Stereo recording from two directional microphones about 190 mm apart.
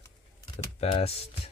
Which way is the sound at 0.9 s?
30° left (ahead or behind).